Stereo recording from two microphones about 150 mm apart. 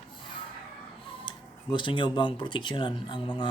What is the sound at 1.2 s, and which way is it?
Speech, 30° left (ahead or behind).